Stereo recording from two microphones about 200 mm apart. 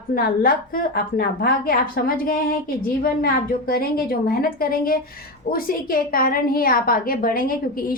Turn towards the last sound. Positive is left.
turn(degrees=45)  # may be behind; listen again after turning